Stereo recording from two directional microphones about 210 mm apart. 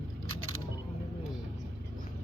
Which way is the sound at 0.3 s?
90° right.